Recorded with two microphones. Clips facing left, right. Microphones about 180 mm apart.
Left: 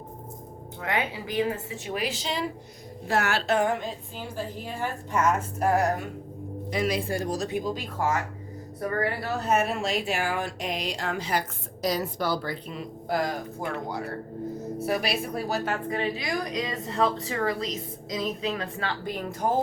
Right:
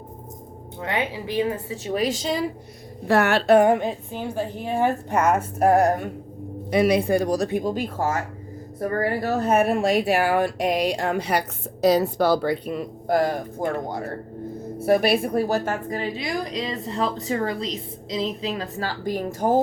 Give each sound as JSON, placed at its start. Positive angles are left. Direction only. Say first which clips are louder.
{"t": 0.8, "sound": "speech", "louder": "right 3 dB", "side_deg": -30}
{"t": 1.9, "sound": "a woman's voice", "louder": "right 7 dB", "side_deg": -40}
{"t": 3.1, "sound": "a woman's voice", "louder": "right 8 dB", "side_deg": -60}